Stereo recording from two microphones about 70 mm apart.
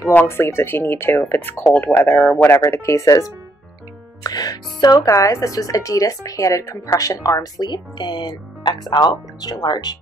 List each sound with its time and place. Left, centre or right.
0.3 s speech: left
4.2 s speech: left
5.0 s speech: left